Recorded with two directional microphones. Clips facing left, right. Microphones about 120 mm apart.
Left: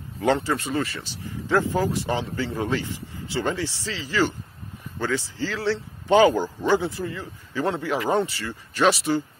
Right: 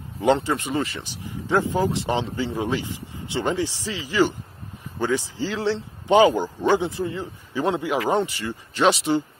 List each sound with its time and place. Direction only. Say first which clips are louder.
0.2 s a man's voice: right 2 dB; 20° right (ahead or behind)